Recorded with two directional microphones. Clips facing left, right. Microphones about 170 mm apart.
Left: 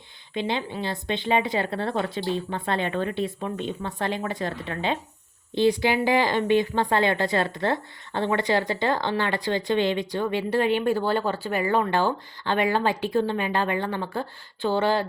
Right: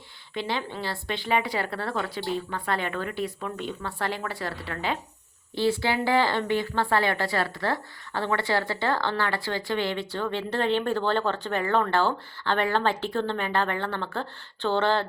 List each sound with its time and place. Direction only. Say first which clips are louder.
0.3 s a woman's voice: left 3 dB; 20° left (ahead or behind)